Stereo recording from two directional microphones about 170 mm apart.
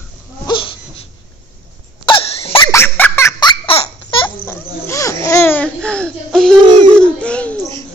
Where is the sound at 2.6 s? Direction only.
15° left (ahead or behind).